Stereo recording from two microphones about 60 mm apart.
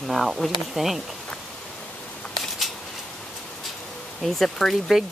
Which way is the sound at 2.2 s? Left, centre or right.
Centre.